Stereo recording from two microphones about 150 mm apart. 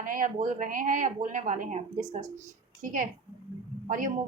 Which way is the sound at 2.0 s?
25° right (ahead or behind).